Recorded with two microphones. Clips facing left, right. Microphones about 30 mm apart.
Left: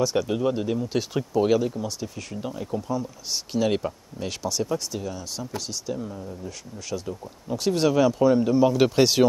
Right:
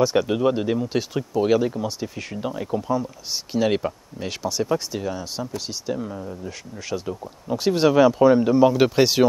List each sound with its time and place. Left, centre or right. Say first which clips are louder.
0.0 s speech: right 4 dB; centre
1.1 s speech: right 1 dB; centre
1.6 s speech: right 3 dB; centre
4.6 s speech: right 4 dB; right